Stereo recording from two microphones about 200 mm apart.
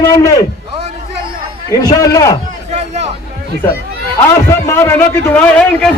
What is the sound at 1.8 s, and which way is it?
Speech, 15° left (ahead or behind).